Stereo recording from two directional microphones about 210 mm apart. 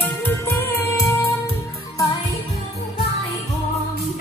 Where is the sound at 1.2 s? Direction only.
25° left (ahead or behind).